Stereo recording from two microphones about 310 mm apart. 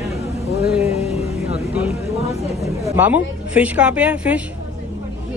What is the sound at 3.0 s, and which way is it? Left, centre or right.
A woman's voice, centre.